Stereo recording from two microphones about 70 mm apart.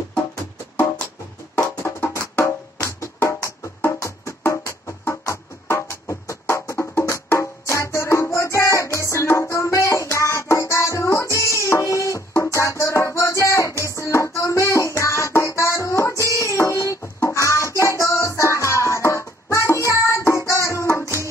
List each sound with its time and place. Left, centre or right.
1.8 s music: left